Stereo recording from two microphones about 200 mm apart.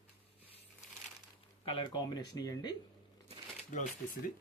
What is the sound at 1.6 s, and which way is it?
Speech, 25° left (ahead or behind).